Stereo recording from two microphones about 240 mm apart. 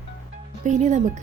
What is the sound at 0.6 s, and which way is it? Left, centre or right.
Speech, right.